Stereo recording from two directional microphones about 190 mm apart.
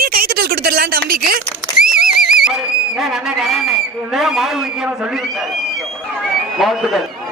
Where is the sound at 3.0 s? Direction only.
Centre (ahead or behind).